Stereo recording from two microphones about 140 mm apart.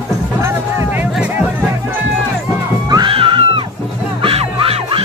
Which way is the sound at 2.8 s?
30° right (ahead or behind).